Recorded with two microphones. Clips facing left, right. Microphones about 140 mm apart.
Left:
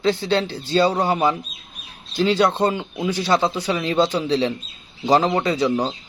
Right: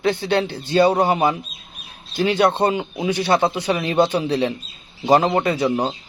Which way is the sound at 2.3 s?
60° right (ahead or behind).